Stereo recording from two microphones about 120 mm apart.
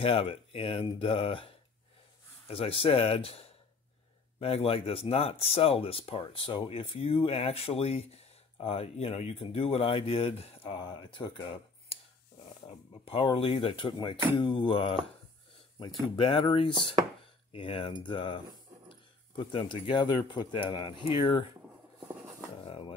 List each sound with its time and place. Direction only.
0.0 s speech: 50° left (ahead or behind)
10.8 s speech: 40° left (ahead or behind)
16.2 s speech: 45° left (ahead or behind)
22.7 s speech: 50° left (ahead or behind)